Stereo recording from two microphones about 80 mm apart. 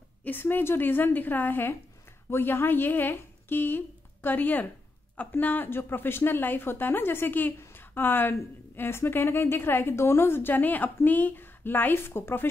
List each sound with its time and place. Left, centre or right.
0.2 s a woman's voice: left